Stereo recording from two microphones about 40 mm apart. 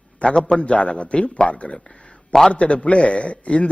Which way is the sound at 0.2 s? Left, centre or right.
Left.